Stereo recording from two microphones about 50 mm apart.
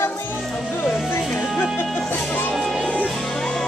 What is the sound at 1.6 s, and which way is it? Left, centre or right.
Music, left.